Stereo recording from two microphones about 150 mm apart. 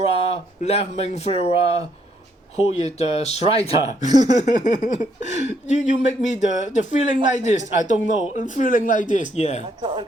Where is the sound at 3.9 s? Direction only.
50° left (ahead or behind).